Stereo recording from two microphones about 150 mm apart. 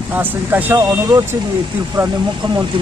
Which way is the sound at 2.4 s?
30° right (ahead or behind).